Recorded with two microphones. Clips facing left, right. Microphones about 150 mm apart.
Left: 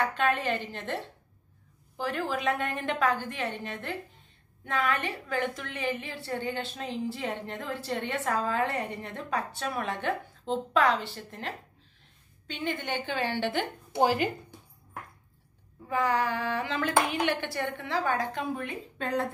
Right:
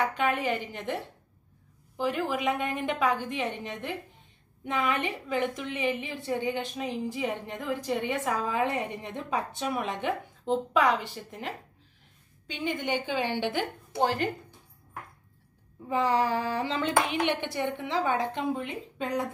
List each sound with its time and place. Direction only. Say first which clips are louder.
0.0 s a woman's voice: even; 15° right (ahead or behind)
14.0 s speech: left 2 dB; 10° left (ahead or behind)
15.9 s a woman's voice: right 2 dB; 30° right (ahead or behind)